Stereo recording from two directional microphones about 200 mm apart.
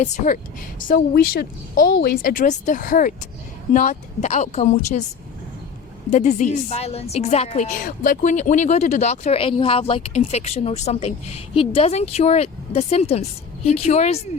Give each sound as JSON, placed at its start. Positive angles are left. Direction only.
{"t": 0.0, "sound": "a woman's voice", "side_deg": 35}
{"t": 6.1, "sound": "a woman's voice", "side_deg": 35}